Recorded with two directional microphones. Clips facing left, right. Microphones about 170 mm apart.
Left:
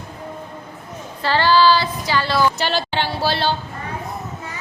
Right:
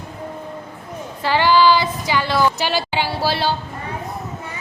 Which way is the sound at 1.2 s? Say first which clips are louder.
Right 1 dB; 15° right (ahead or behind).